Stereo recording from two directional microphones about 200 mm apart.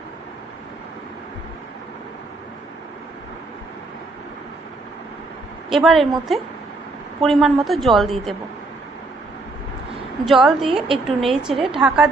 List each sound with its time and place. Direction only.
5.7 s a woman's voice: centre (ahead or behind)
10.2 s a woman's voice: centre (ahead or behind)